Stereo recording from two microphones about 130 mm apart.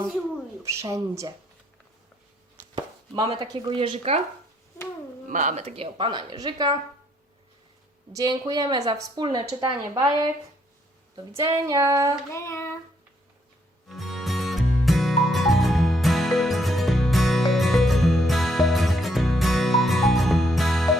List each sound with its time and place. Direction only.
0.6 s speech: 25° right (ahead or behind)
2.7 s chopping: 30° right (ahead or behind)
3.7 s a woman's voice: 45° right (ahead or behind)
5.3 s a woman's voice: 75° right (ahead or behind); by 6.7 s 30° right (ahead or behind)
8.1 s speech: 30° right (ahead or behind)
11.6 s speech: 25° right (ahead or behind)
12.3 s child singing: 20° left (ahead or behind)
13.8 s music: centre (ahead or behind)